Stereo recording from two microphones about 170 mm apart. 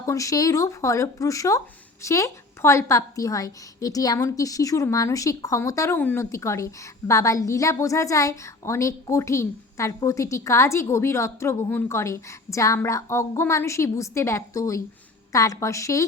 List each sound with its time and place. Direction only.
0.0 s speech: 20° left (ahead or behind)